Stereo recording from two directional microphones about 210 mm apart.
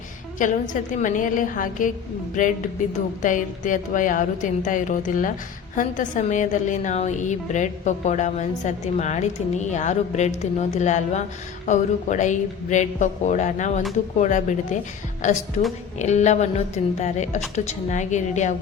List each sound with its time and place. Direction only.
0.3 s a woman's voice: 35° left (ahead or behind)